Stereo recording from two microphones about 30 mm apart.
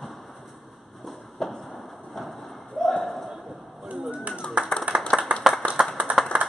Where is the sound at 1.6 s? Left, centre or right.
Centre.